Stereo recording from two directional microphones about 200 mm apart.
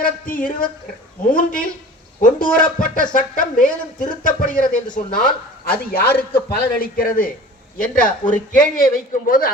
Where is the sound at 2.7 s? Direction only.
40° left (ahead or behind).